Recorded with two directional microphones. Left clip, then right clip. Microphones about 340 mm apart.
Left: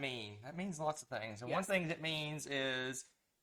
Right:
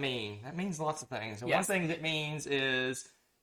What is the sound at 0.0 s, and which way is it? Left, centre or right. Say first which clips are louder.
Speech: right 7 dB; centre.